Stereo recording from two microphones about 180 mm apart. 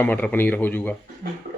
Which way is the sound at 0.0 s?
10° left (ahead or behind).